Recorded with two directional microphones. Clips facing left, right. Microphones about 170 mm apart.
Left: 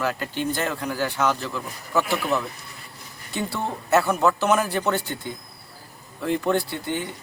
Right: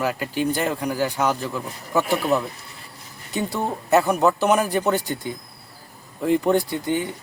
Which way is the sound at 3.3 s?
15° right (ahead or behind).